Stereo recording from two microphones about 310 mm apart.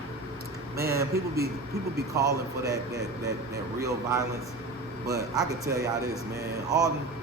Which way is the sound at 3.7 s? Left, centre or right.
Centre.